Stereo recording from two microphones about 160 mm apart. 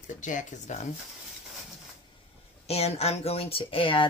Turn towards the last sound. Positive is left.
turn(degrees=35)  # may be behind; listen again after turning